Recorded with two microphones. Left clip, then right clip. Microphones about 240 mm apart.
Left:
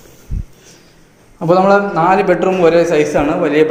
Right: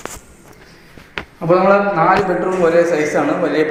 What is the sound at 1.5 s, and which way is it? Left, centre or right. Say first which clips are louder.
A man's voice: left 2 dB; left.